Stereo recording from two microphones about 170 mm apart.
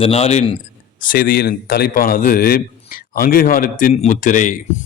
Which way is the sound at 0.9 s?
55° left (ahead or behind).